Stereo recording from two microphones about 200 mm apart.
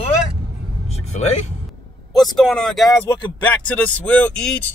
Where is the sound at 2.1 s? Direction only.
Centre (ahead or behind).